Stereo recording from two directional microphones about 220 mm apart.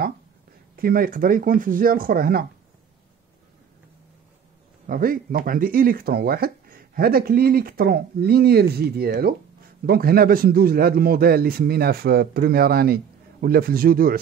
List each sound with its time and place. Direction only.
0.7 s speech: 40° right (ahead or behind)
4.8 s speech: 40° right (ahead or behind)